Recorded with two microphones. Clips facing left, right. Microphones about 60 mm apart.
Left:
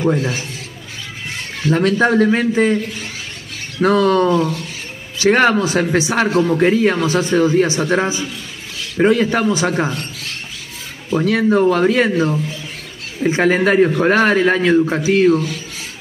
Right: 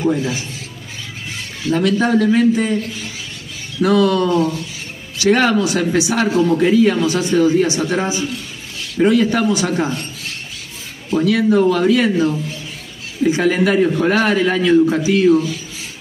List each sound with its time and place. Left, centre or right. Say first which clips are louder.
0.0 s a man's voice: left 1 dB; left
1.7 s a man's voice: left 1 dB; left
3.8 s a man's voice: left 1 dB; left
11.1 s a man's voice: even; left